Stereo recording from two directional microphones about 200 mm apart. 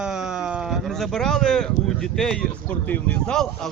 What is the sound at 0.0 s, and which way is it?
Speech, 5° right (ahead or behind).